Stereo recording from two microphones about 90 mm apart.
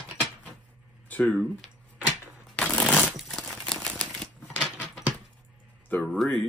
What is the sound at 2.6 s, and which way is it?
Shuffling cards, 10° left (ahead or behind).